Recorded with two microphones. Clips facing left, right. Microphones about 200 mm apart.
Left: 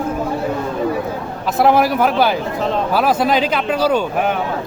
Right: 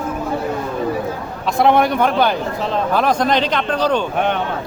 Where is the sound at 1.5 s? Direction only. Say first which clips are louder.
Even; 5° left (ahead or behind).